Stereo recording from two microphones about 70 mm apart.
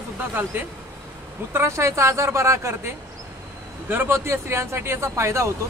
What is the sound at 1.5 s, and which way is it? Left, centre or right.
Speech, right.